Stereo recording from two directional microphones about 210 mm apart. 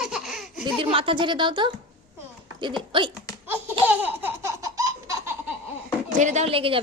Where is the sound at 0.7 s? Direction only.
25° right (ahead or behind).